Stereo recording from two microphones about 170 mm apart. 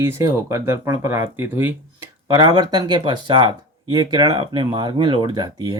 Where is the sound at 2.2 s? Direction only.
25° right (ahead or behind).